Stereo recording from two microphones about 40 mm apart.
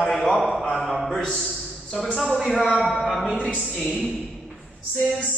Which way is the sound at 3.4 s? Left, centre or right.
Left.